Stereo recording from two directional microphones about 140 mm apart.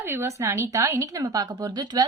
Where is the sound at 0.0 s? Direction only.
15° right (ahead or behind).